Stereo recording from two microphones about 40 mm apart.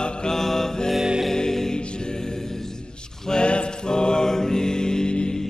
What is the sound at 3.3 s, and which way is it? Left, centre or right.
Music, left.